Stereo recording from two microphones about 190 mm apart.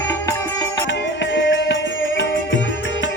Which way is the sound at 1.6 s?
70° left (ahead or behind).